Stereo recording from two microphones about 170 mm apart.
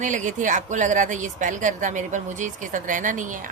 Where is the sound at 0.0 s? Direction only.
45° right (ahead or behind).